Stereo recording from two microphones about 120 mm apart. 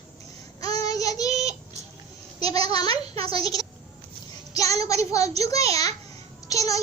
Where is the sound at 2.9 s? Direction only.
50° right (ahead or behind).